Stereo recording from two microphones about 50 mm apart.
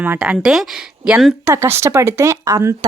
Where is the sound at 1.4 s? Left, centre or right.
Right.